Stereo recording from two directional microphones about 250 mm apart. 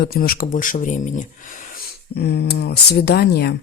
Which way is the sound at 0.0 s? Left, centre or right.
Left.